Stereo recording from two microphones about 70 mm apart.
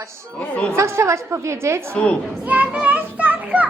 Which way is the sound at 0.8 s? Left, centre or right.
Right.